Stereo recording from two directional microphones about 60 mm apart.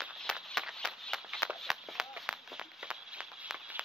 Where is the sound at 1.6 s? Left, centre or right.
Centre.